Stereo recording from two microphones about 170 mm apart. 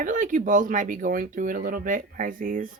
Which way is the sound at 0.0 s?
50° right (ahead or behind).